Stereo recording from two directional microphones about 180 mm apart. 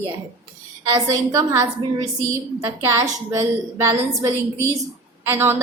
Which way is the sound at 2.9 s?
15° right (ahead or behind).